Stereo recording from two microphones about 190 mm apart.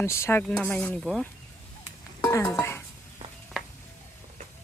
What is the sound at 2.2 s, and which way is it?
Dishes, 15° left (ahead or behind).